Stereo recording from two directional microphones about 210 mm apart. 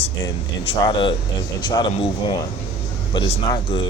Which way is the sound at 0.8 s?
25° left (ahead or behind).